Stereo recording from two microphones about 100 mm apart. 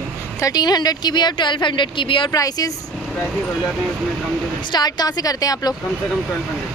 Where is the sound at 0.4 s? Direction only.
40° left (ahead or behind); by 2.3 s 55° left (ahead or behind).